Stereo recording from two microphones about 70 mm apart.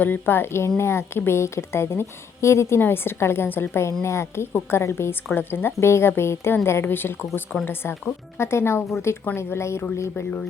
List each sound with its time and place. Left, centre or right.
0.0 s a woman's voice: left